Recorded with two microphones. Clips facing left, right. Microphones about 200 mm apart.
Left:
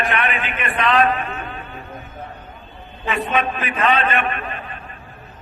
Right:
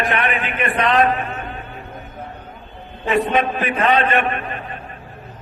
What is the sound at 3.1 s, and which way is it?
A man's voice, 40° right (ahead or behind).